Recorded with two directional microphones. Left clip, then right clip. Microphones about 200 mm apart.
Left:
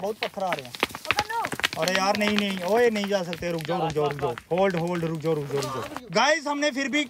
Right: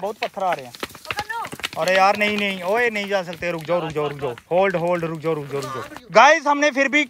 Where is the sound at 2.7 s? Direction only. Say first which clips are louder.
Even; 15° left (ahead or behind).